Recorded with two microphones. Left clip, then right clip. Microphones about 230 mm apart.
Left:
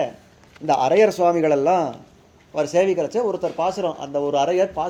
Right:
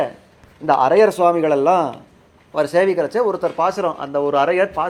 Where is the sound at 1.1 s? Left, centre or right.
Centre.